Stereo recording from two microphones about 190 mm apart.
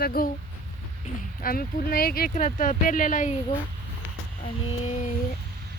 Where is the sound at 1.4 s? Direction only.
50° left (ahead or behind).